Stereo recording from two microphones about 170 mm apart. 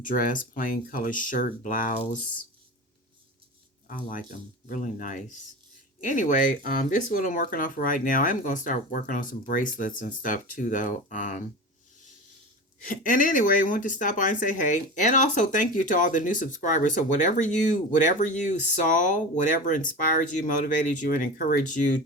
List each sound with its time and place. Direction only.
0.0 s a woman's voice: 50° left (ahead or behind)
3.8 s a woman's voice: 50° left (ahead or behind)
12.8 s a woman's voice: 55° left (ahead or behind)